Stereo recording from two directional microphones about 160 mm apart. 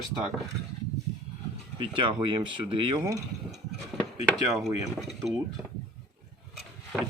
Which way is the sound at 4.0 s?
Centre (ahead or behind).